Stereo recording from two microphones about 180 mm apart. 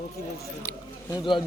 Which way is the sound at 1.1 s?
25° left (ahead or behind).